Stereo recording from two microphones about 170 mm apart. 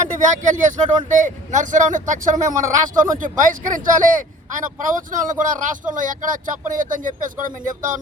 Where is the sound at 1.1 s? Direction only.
45° right (ahead or behind).